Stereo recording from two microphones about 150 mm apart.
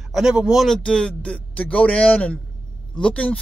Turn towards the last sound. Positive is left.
turn(degrees=5)  # may be behind; listen again after turning